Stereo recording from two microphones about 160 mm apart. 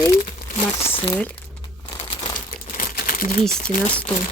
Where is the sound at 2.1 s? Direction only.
30° left (ahead or behind).